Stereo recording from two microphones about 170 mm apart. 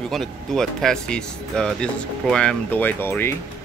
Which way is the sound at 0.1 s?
Centre (ahead or behind).